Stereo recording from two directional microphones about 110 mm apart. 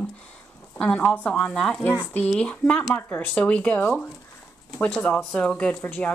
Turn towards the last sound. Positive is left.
turn(degrees=15)  # may be behind; listen again after turning